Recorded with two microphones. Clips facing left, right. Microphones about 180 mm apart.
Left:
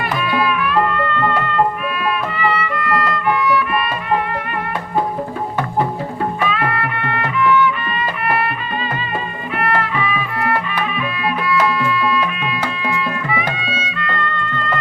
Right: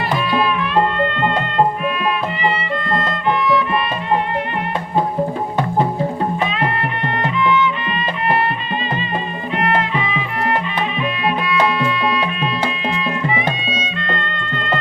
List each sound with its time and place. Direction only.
0.1 s music: 25° right (ahead or behind)
6.4 s music: 20° right (ahead or behind)
9.6 s music: 20° right (ahead or behind)